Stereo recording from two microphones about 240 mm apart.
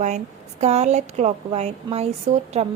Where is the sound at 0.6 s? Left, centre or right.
Right.